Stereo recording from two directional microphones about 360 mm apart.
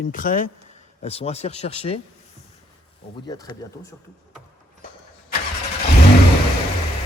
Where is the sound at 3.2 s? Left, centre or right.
Centre.